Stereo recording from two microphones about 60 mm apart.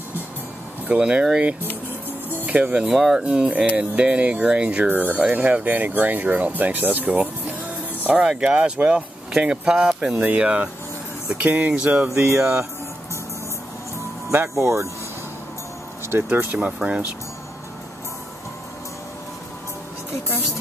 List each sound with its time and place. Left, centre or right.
0.8 s speech: centre
2.8 s speech: centre
4.8 s speech: right
8.1 s speech: centre
10.1 s speech: right
14.3 s speech: right
16.1 s speech: right
16.6 s speech: centre